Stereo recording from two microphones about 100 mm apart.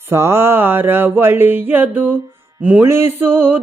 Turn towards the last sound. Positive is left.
turn(degrees=-20)  # may be behind; listen again after turning